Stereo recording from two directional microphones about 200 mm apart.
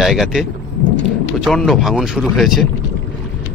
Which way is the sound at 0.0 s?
Centre (ahead or behind).